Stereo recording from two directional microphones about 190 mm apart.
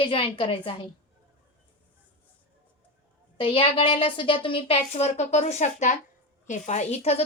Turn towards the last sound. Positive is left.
turn(degrees=35)  # may be behind; listen again after turning